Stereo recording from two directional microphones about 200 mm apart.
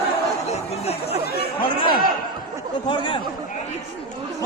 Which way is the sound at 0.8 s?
30° left (ahead or behind).